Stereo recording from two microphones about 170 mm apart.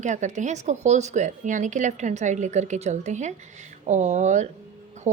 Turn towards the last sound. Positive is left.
turn(degrees=-45)  # may be behind; listen again after turning